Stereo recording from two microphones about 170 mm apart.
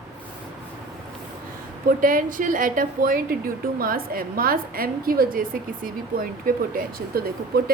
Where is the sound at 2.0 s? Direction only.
55° right (ahead or behind).